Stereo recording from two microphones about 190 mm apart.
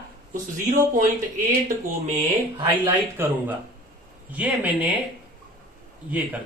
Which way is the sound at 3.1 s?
10° right (ahead or behind).